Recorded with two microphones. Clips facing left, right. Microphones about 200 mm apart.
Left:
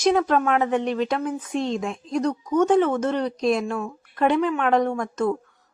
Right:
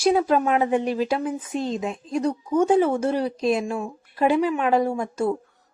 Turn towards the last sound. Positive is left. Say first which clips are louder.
# even
turn(degrees=-10)  # may be behind; listen again after turning